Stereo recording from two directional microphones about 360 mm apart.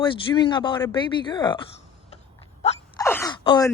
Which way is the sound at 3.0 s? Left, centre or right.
Centre.